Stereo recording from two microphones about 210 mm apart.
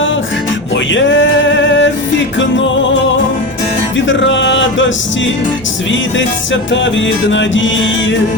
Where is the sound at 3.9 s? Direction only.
60° left (ahead or behind).